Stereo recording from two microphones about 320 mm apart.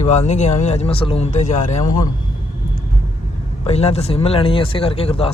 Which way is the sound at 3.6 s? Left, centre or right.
Centre.